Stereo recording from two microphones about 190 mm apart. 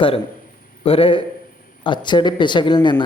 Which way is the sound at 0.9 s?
30° left (ahead or behind).